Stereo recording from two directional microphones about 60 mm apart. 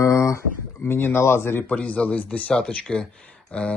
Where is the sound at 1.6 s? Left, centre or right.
Left.